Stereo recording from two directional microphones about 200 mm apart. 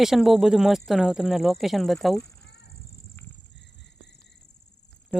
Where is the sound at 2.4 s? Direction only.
55° left (ahead or behind).